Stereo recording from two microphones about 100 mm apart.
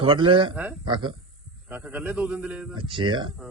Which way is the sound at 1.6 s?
15° right (ahead or behind).